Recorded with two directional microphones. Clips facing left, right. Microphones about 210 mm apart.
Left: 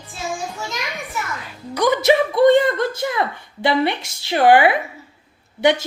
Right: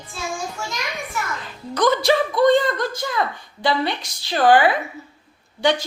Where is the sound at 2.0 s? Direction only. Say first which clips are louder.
Left 3 dB; 25° left (ahead or behind).